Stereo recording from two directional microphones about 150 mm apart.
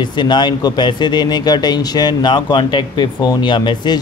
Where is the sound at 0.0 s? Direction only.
30° left (ahead or behind).